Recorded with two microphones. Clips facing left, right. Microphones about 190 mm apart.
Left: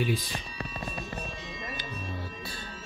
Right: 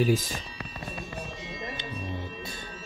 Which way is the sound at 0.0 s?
45° right (ahead or behind).